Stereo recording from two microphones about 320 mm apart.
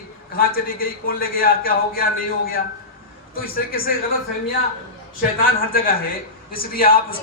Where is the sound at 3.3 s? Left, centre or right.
Left.